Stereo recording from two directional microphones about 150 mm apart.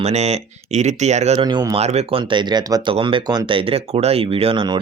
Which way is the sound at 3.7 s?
40° right (ahead or behind).